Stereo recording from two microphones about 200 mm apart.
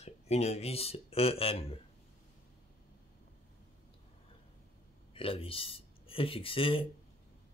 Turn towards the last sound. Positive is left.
turn(degrees=25)  # may be behind; listen again after turning